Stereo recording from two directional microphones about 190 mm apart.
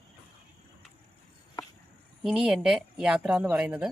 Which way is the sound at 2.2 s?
5° right (ahead or behind).